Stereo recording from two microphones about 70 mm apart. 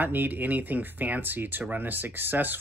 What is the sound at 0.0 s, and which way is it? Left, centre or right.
Speech, right.